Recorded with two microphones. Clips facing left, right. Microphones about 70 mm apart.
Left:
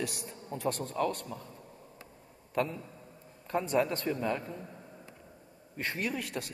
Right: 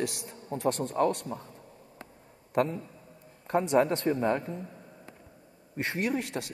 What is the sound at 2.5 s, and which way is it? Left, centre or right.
A man's voice, right.